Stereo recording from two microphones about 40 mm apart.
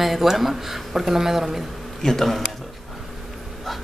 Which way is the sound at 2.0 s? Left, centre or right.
Centre.